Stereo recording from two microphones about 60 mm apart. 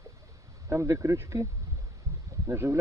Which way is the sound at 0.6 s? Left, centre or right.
Right.